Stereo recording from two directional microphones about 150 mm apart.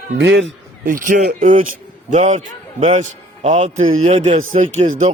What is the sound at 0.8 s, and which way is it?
A man's voice, 65° right (ahead or behind).